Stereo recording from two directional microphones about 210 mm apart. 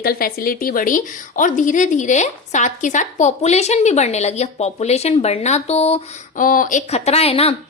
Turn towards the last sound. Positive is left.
turn(degrees=30)  # may be behind; listen again after turning